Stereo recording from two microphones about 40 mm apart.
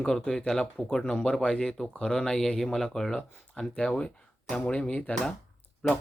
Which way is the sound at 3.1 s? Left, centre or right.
Left.